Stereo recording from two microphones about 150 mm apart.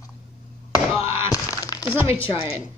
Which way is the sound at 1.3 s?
25° left (ahead or behind).